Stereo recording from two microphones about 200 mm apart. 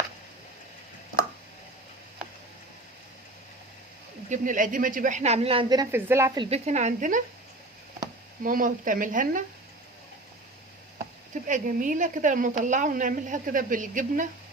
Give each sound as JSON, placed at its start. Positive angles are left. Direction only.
{"t": 4.3, "sound": "a woman's voice", "side_deg": -40}
{"t": 6.4, "sound": "a woman's voice", "side_deg": -35}
{"t": 8.4, "sound": "a woman's voice", "side_deg": -45}
{"t": 11.4, "sound": "a woman's voice", "side_deg": -40}